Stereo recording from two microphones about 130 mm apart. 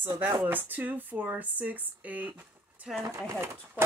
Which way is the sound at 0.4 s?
15° right (ahead or behind).